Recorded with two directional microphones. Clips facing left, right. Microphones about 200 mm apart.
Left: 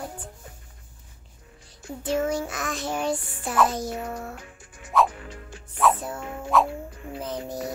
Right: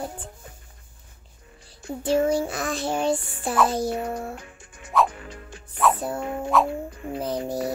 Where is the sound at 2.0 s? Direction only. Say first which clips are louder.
Right 4 dB; 30° right (ahead or behind).